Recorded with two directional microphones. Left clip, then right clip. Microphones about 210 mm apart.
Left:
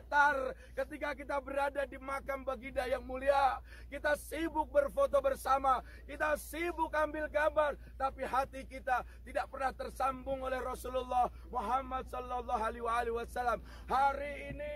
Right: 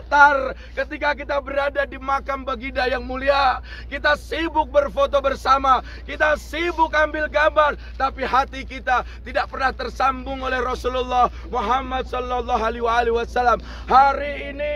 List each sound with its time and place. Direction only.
0.1 s speech: 45° left (ahead or behind); by 14.7 s 10° right (ahead or behind)